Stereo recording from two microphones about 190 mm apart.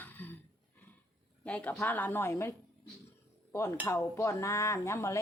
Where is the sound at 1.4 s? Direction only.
5° left (ahead or behind).